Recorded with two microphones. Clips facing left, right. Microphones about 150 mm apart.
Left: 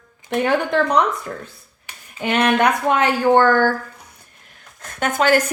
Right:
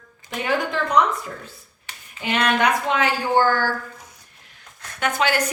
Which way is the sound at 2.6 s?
55° left (ahead or behind).